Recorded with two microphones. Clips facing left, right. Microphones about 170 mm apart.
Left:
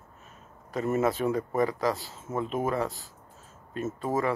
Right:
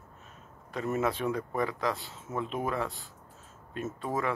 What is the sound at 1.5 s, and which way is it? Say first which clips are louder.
Speech: left 4 dB; 40° left (ahead or behind).